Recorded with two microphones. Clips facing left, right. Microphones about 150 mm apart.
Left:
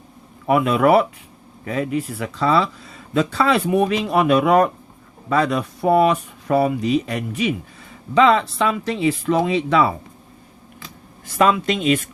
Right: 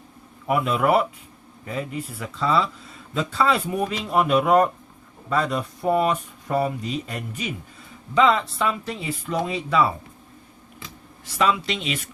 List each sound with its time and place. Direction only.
0.4 s speech: 80° left
11.3 s speech: 50° left (ahead or behind)